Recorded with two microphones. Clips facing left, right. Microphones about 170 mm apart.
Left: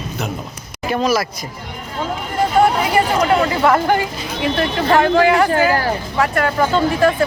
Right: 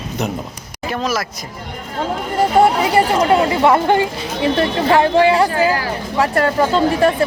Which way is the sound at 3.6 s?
25° right (ahead or behind).